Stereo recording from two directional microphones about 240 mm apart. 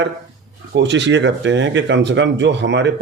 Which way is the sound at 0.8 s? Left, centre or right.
Right.